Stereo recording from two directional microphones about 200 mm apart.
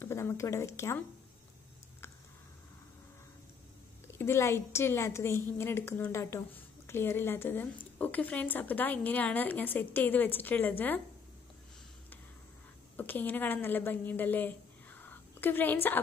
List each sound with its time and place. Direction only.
0.0 s speech: 10° left (ahead or behind)
4.2 s a woman's voice: 10° left (ahead or behind)
12.9 s a woman's voice: 10° left (ahead or behind)